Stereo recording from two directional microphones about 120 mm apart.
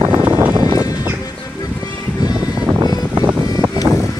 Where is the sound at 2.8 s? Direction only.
35° right (ahead or behind).